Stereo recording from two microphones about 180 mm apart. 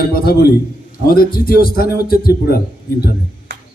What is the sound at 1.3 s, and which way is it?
A man's voice, 55° left (ahead or behind).